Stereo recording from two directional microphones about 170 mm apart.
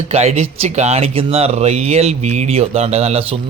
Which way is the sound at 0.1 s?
40° right (ahead or behind).